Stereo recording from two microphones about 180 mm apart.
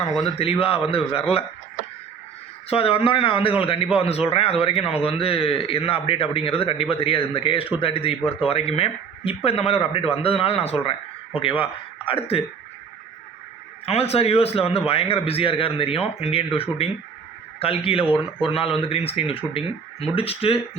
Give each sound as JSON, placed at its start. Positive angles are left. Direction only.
{"t": 0.3, "sound": "a man's voice", "side_deg": 35}
{"t": 2.6, "sound": "a man's voice", "side_deg": 30}
{"t": 13.8, "sound": "a man's voice", "side_deg": 35}